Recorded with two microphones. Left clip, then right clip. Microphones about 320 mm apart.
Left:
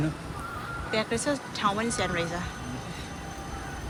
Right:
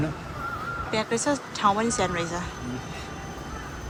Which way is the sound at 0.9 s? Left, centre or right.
Centre.